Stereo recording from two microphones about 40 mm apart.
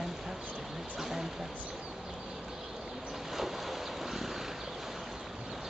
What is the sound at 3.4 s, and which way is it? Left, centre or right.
Boat, centre.